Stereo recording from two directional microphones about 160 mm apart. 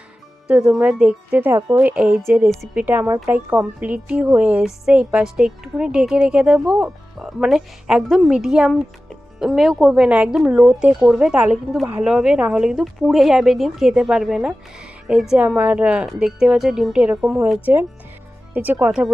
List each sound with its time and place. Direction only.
0.4 s speech: 5° right (ahead or behind)
2.5 s a woman's voice: centre (ahead or behind)
2.8 s a woman's voice: 10° right (ahead or behind)